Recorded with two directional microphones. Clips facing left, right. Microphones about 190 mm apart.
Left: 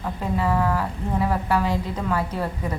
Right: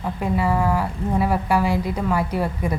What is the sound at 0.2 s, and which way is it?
A woman's voice, 10° right (ahead or behind).